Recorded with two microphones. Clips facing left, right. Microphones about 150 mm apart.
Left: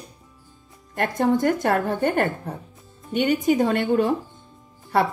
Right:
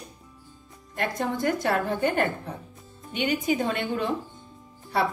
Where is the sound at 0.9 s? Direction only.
50° left (ahead or behind).